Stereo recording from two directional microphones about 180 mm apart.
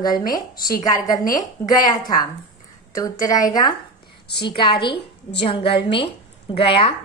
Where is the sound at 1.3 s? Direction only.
20° left (ahead or behind).